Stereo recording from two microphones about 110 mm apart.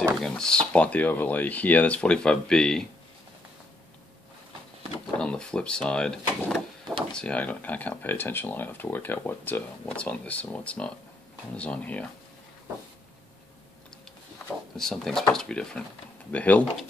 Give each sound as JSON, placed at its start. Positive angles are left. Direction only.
{"t": 0.2, "sound": "speech", "side_deg": 5}
{"t": 5.2, "sound": "speech", "side_deg": 5}
{"t": 14.8, "sound": "speech", "side_deg": 5}